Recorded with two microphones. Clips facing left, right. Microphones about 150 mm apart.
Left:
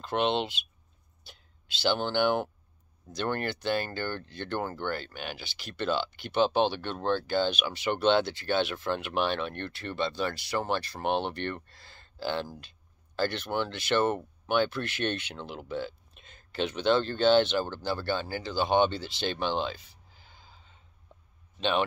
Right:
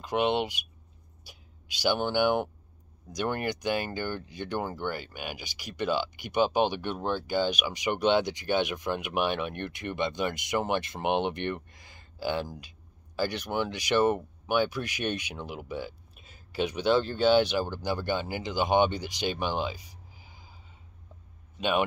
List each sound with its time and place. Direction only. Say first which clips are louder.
0.0 s speech: right 1 dB; 10° right (ahead or behind)